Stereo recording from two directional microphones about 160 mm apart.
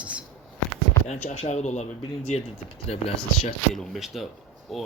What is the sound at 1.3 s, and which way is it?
Speech, 45° left (ahead or behind).